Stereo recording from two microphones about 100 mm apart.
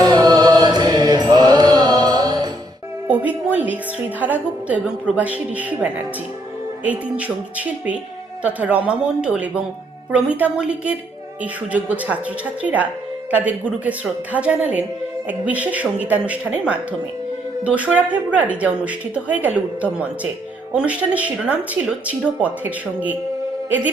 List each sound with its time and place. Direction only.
0.0 s music: 40° right (ahead or behind)
3.1 s music: 15° right (ahead or behind)
6.8 s speech: 15° right (ahead or behind)